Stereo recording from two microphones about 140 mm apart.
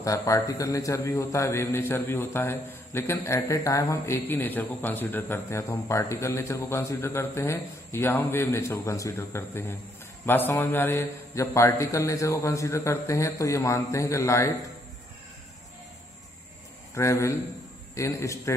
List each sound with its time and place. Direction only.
0.0 s a man's voice: 25° left (ahead or behind)
16.9 s a man's voice: 20° left (ahead or behind)